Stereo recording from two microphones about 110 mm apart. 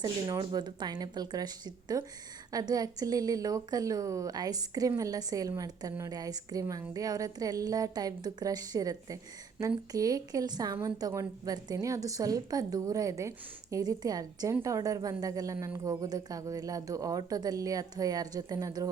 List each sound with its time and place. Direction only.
0.0 s a woman's voice: 45° right (ahead or behind)